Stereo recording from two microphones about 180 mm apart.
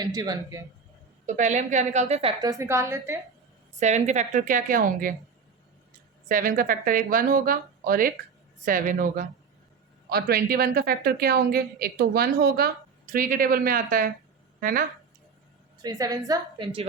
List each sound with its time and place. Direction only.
0.0 s a woman's voice: 20° right (ahead or behind)
1.3 s a woman's voice: 40° right (ahead or behind)
2.4 s a woman's voice: 20° right (ahead or behind)
3.8 s speech: 40° right (ahead or behind)
6.2 s a woman's voice: 50° right (ahead or behind)
15.8 s a woman's voice: 20° right (ahead or behind)